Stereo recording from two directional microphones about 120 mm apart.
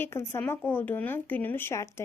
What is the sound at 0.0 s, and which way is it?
A woman's voice, 20° left (ahead or behind).